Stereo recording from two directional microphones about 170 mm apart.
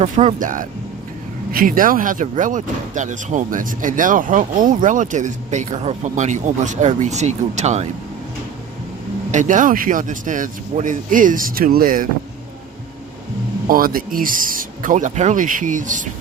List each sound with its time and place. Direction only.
0.0 s speech: 40° right (ahead or behind)
9.3 s speech: 45° right (ahead or behind)
13.7 s speech: 55° right (ahead or behind)